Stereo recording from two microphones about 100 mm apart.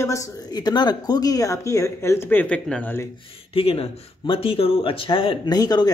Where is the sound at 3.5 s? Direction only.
75° left (ahead or behind).